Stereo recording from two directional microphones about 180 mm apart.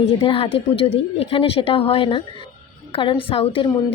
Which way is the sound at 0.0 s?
30° left (ahead or behind).